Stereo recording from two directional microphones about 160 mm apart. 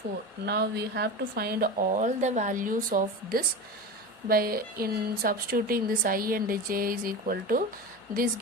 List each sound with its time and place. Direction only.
0.4 s a woman's voice: 85° right; by 7.6 s 65° right (ahead or behind)